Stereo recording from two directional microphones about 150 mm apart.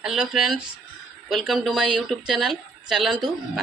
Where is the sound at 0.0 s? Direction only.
5° right (ahead or behind).